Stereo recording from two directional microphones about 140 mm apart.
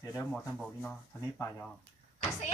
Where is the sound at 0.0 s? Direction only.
20° left (ahead or behind).